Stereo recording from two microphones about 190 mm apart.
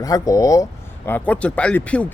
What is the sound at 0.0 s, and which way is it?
Speech, 20° left (ahead or behind).